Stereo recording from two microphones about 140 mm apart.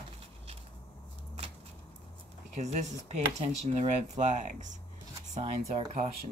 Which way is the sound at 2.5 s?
55° right (ahead or behind).